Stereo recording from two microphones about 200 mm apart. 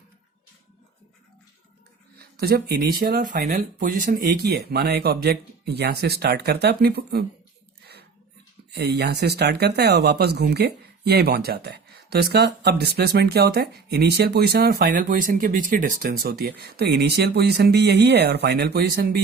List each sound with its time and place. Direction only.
2.1 s speech: 50° right (ahead or behind)
8.7 s speech: 55° right (ahead or behind)